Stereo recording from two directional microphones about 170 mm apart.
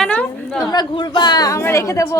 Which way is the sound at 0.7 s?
25° left (ahead or behind).